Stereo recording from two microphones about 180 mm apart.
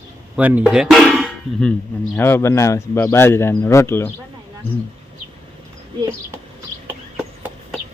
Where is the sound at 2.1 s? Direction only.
10° left (ahead or behind).